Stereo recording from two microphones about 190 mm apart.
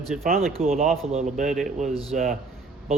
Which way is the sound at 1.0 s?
35° right (ahead or behind).